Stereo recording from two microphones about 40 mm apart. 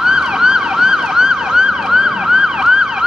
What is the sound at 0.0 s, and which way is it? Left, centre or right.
Emergency vehicle, centre.